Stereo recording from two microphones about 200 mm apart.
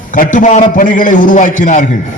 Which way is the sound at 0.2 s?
40° left (ahead or behind).